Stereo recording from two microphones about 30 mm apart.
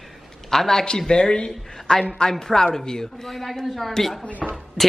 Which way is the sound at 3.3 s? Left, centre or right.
Centre.